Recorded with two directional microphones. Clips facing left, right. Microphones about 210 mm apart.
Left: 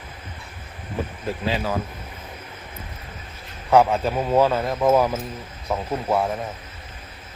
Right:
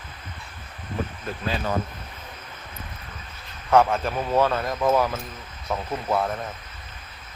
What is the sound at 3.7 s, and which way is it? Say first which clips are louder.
A man's voice: left 2 dB; 15° left (ahead or behind).